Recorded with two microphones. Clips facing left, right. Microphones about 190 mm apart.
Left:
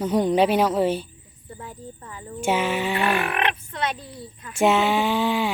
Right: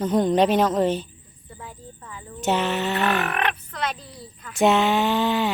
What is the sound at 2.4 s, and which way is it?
Speech, 10° left (ahead or behind).